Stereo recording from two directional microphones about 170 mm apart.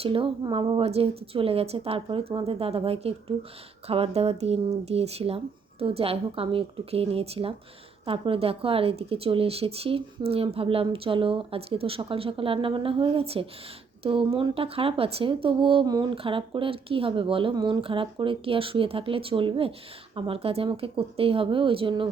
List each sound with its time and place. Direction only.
0.0 s speech: 30° right (ahead or behind)